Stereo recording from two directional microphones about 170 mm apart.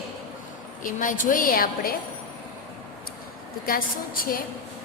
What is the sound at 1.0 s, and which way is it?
Speech, 50° left (ahead or behind).